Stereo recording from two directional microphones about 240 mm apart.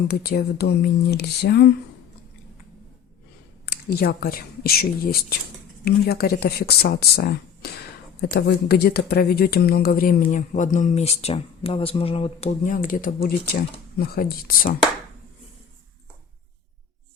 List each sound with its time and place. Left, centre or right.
0.1 s speech: left
3.7 s speech: left